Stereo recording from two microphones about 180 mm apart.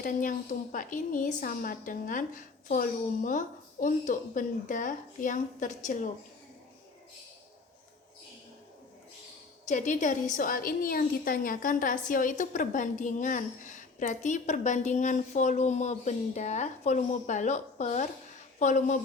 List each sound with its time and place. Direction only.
0.0 s a woman's voice: 45° left (ahead or behind)
9.6 s a woman's voice: 45° left (ahead or behind)